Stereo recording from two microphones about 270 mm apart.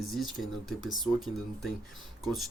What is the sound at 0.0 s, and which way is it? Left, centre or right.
Speech, centre.